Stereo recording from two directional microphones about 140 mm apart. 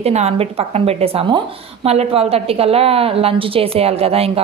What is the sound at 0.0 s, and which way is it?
Speech, 50° right (ahead or behind).